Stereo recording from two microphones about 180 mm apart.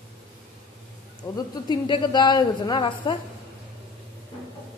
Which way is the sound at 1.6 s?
25° left (ahead or behind).